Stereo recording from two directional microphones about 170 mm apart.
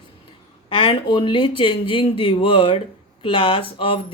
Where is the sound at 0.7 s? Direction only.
30° left (ahead or behind).